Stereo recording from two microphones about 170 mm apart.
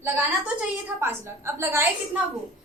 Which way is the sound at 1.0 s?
15° right (ahead or behind).